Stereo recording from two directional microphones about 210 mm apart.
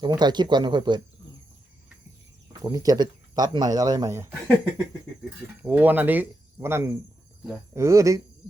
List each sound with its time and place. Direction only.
0.0 s speech: 20° right (ahead or behind)
2.5 s speech: 20° right (ahead or behind)
5.6 s speech: 10° right (ahead or behind)